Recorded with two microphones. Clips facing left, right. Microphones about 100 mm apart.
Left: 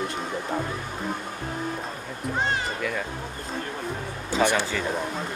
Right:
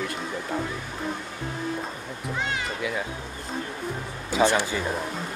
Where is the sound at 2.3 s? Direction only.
40° left (ahead or behind).